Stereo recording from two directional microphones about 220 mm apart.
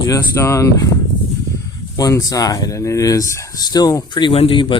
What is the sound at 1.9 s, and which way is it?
Speech, 15° left (ahead or behind).